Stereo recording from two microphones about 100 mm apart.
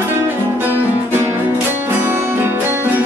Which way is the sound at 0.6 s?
20° right (ahead or behind).